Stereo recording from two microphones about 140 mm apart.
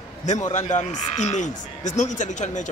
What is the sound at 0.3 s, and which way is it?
Speech, 60° left (ahead or behind).